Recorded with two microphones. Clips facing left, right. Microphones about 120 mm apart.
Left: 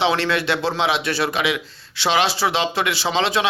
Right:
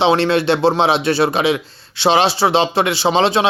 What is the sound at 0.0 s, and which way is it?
Speech, 25° right (ahead or behind).